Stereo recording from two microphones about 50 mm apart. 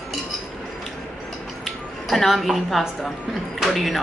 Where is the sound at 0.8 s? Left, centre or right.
Centre.